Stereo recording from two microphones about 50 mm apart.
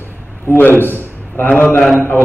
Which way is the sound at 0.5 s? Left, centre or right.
Left.